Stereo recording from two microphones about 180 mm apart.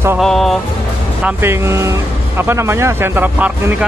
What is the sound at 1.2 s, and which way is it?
Speech, 10° right (ahead or behind).